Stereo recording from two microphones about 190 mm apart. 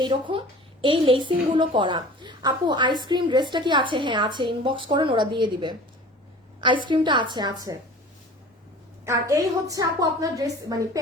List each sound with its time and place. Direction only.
0.0 s a woman's voice: 25° right (ahead or behind)
9.0 s a woman's voice: 15° right (ahead or behind)